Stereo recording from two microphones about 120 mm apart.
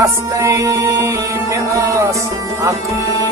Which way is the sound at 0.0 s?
25° right (ahead or behind).